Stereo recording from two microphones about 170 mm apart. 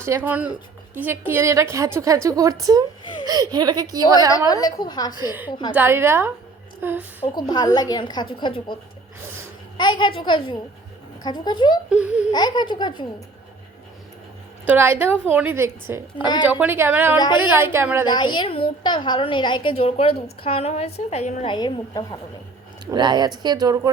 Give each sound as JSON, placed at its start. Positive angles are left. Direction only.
{"t": 0.0, "sound": "a woman's voice", "side_deg": -15}
{"t": 4.3, "sound": "a woman's voice", "side_deg": 20}
{"t": 5.1, "sound": "a woman's voice", "side_deg": -15}
{"t": 5.5, "sound": "a woman's voice", "side_deg": 25}
{"t": 5.7, "sound": "a woman's voice", "side_deg": -15}
{"t": 7.3, "sound": "a woman's voice", "side_deg": 25}
{"t": 11.9, "sound": "a woman's voice", "side_deg": -5}
{"t": 12.3, "sound": "a woman's voice", "side_deg": 25}
{"t": 14.7, "sound": "a woman's voice", "side_deg": -10}
{"t": 18.0, "sound": "a woman's voice", "side_deg": 25}
{"t": 21.4, "sound": "a woman's voice", "side_deg": 25}
{"t": 22.9, "sound": "speech", "side_deg": -25}